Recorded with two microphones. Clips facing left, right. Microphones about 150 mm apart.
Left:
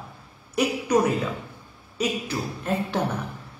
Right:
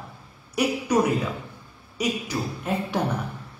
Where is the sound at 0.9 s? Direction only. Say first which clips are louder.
Left 1 dB; 10° right (ahead or behind).